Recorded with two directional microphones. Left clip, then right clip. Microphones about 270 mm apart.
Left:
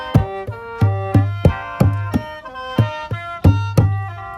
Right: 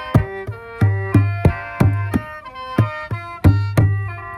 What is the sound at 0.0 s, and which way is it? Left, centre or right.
Music, centre.